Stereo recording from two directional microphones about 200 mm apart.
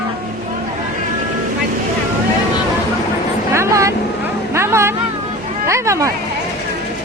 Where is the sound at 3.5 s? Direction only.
15° right (ahead or behind).